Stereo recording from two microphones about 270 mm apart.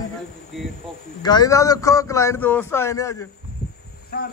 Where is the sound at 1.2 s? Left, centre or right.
Centre.